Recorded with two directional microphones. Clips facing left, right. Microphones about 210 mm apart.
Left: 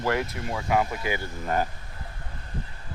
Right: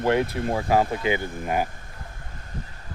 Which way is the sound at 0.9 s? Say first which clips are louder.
Right 5 dB; 20° right (ahead or behind).